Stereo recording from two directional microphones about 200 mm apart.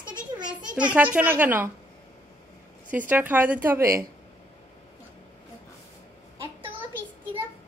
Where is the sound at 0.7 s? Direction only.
5° right (ahead or behind).